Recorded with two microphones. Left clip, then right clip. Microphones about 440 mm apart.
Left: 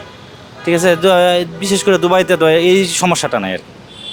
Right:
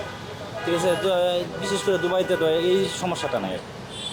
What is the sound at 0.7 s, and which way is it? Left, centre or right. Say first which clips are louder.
Speech: left 11 dB; left.